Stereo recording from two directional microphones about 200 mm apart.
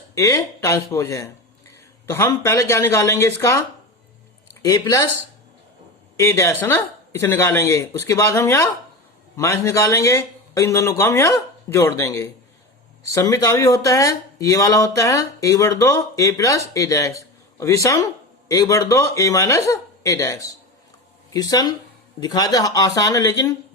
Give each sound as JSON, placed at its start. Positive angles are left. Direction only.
{"t": 0.1, "sound": "speech", "side_deg": 15}
{"t": 4.6, "sound": "speech", "side_deg": 20}
{"t": 6.1, "sound": "speech", "side_deg": 15}